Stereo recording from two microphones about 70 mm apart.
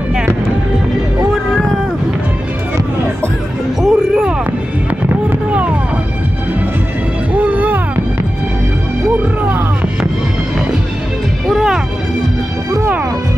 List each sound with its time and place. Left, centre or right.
3.8 s a sound: centre
7.3 s music: right
11.4 s music: centre